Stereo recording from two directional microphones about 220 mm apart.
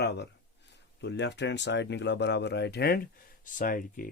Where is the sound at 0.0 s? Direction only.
50° left (ahead or behind).